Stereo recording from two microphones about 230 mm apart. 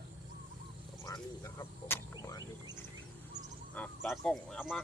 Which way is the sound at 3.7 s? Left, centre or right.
Centre.